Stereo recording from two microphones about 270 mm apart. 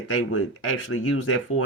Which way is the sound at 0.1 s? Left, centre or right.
Left.